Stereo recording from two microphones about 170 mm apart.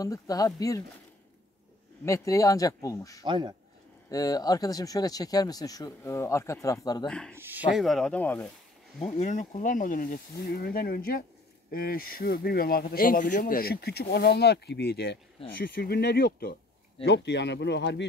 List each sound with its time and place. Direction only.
0.0 s speech: 20° left (ahead or behind)
2.0 s speech: 20° left (ahead or behind)
3.3 s speech: 25° right (ahead or behind)
4.1 s speech: 20° left (ahead or behind)
7.1 s speech: 5° left (ahead or behind)
7.3 s speech: 10° right (ahead or behind); by 8.5 s 10° left (ahead or behind)
9.0 s speech: 45° left (ahead or behind); by 15.1 s 75° left (ahead or behind)
15.6 s speech: 65° left (ahead or behind)
17.0 s speech: 90° left